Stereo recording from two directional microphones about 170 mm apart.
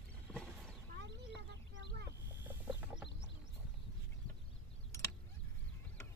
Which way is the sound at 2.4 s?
10° right (ahead or behind).